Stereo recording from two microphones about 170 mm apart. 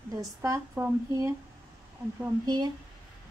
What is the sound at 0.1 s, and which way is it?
Speech, 20° right (ahead or behind).